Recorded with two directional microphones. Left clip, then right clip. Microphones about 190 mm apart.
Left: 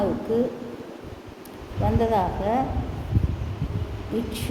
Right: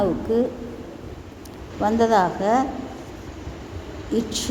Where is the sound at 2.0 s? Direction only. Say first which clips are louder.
Right 5 dB; 30° right (ahead or behind).